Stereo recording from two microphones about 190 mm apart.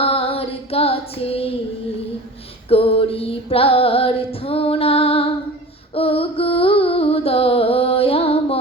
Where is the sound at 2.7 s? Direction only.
30° left (ahead or behind).